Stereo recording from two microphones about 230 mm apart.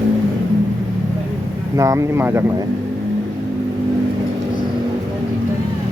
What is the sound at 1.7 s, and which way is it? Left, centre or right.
Speech, centre.